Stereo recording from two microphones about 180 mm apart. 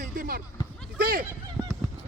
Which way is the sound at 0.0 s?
50° right (ahead or behind).